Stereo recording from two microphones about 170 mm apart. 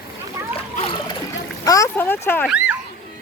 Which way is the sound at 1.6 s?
20° left (ahead or behind).